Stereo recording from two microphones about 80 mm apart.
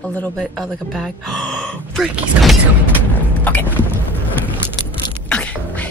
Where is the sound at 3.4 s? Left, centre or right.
Left.